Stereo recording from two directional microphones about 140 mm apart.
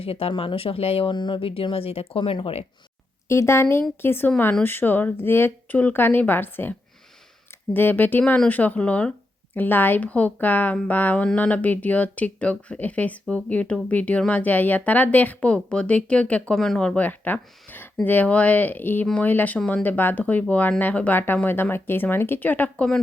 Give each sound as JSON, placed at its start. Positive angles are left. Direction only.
{"t": 0.0, "sound": "speech", "side_deg": 45}
{"t": 3.2, "sound": "a woman's voice", "side_deg": 20}